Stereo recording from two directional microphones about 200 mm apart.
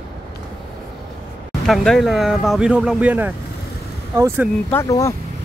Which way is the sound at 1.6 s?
Centre (ahead or behind).